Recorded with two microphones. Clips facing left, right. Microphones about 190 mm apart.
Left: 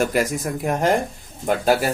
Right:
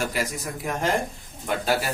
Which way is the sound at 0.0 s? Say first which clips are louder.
Left 7 dB; 50° left (ahead or behind).